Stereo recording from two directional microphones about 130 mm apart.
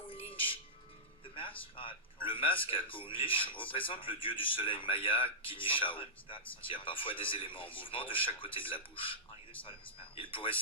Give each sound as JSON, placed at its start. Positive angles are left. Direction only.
{"t": 0.1, "sound": "music", "side_deg": 45}
{"t": 1.7, "sound": "speech", "side_deg": 40}